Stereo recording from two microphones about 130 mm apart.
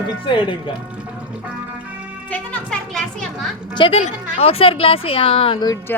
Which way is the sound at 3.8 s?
45° left (ahead or behind).